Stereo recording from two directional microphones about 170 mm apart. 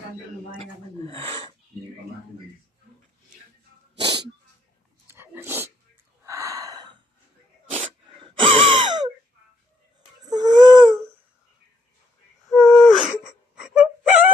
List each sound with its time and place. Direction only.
0.6 s gasp: 35° right (ahead or behind)
4.0 s dog: 25° right (ahead or behind)
5.0 s dog: 15° right (ahead or behind)
6.2 s gasp: 20° right (ahead or behind)
7.7 s sneeze: 35° right (ahead or behind)
10.2 s baby cry: 25° right (ahead or behind)
12.5 s wheeze: centre (ahead or behind)
12.8 s wail: centre (ahead or behind)